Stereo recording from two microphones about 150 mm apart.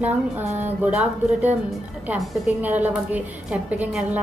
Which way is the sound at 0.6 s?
10° right (ahead or behind).